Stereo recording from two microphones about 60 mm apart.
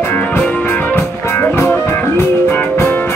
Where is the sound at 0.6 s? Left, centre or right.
Left.